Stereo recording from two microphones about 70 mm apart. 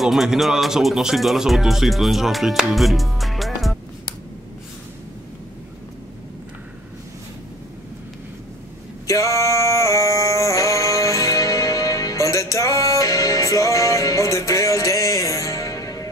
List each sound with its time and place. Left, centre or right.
0.0 s speech: centre
9.0 s music: left